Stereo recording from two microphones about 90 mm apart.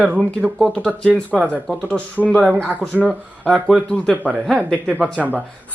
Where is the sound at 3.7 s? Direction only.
10° left (ahead or behind).